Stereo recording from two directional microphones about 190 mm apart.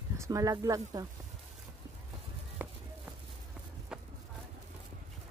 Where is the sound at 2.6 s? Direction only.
10° right (ahead or behind).